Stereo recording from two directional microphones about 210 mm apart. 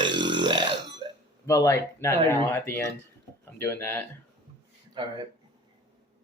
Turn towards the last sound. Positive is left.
turn(degrees=-20)  # may be behind; listen again after turning